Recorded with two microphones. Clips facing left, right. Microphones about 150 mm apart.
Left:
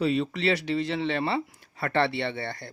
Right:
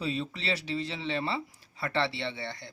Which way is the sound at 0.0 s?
65° left (ahead or behind).